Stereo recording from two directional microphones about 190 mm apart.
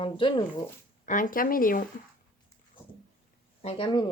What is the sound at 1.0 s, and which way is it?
Speech, 45° left (ahead or behind).